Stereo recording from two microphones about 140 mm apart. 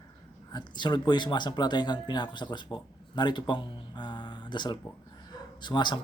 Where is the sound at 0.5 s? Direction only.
30° left (ahead or behind).